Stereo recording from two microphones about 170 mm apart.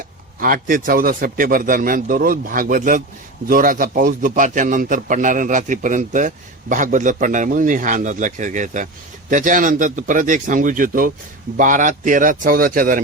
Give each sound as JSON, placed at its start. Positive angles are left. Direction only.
{"t": 0.3, "sound": "a man's voice", "side_deg": -55}